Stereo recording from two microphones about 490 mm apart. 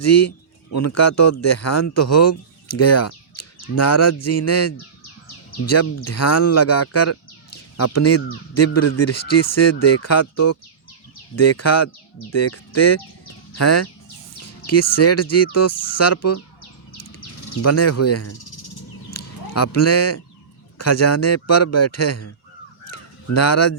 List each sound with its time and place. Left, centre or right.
0.0 s a man's voice: left
13.6 s a man's voice: left
17.2 s bird: left
17.6 s a man's voice: left
18.3 s cricket: left
19.1 s a man's voice: left
22.9 s caw: left